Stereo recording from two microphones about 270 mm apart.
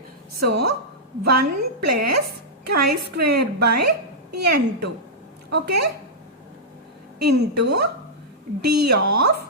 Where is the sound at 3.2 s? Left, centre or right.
Right.